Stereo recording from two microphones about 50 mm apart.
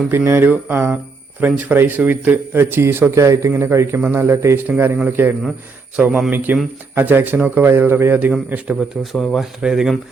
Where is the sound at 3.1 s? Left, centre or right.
Right.